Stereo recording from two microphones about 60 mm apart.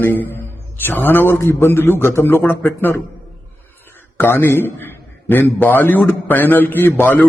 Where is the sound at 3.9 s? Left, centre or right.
Left.